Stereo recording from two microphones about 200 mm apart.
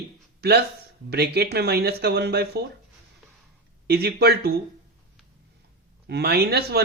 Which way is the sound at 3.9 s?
55° right (ahead or behind).